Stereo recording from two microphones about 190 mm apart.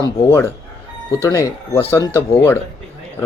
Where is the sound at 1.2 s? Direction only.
15° left (ahead or behind).